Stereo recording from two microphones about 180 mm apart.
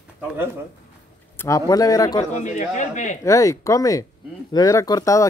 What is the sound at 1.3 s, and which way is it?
Speech, 15° left (ahead or behind).